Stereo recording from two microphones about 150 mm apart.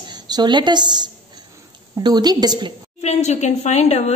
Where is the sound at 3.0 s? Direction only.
50° left (ahead or behind).